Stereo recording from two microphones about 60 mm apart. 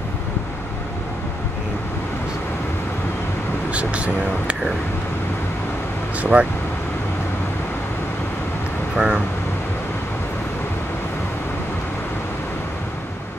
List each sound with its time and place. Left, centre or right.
3.7 s speech: right
6.2 s speech: centre
8.9 s speech: centre